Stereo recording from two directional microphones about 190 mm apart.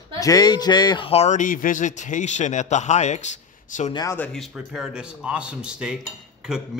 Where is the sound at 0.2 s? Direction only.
20° left (ahead or behind); by 3.3 s 40° left (ahead or behind).